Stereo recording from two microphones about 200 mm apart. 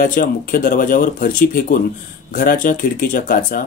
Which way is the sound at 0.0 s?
45° left (ahead or behind).